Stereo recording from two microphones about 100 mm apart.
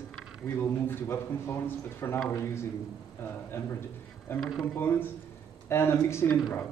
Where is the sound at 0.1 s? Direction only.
5° left (ahead or behind).